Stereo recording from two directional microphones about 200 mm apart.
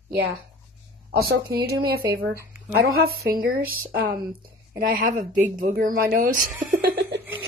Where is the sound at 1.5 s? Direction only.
50° right (ahead or behind).